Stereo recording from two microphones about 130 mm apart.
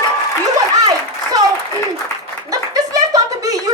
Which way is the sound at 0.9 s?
30° right (ahead or behind).